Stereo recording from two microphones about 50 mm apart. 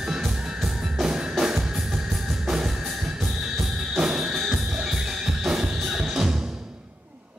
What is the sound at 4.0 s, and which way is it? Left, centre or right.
Music, centre.